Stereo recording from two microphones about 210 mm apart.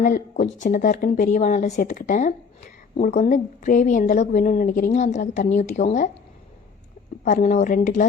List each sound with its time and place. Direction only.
0.0 s speech: 35° left (ahead or behind)
7.3 s speech: 35° left (ahead or behind)